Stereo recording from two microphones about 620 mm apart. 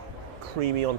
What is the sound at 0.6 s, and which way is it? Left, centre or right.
Speech, right.